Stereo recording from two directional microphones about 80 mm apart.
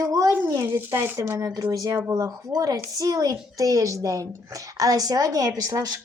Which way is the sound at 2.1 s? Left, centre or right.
Right.